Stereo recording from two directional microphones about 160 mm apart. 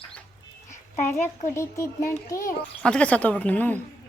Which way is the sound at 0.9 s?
15° left (ahead or behind).